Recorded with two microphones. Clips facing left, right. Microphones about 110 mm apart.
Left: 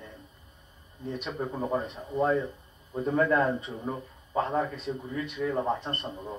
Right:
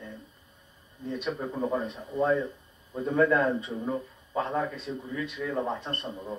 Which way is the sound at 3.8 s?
15° left (ahead or behind).